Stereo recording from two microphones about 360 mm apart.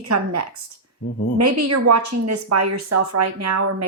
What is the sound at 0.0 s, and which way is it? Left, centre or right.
Speech, right.